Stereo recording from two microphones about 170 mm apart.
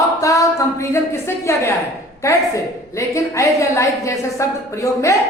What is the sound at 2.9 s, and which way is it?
A woman's voice, 20° left (ahead or behind).